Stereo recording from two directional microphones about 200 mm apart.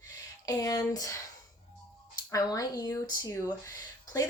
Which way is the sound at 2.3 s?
20° left (ahead or behind).